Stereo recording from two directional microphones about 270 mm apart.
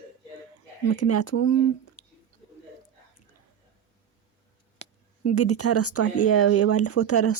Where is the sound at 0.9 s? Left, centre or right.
Left.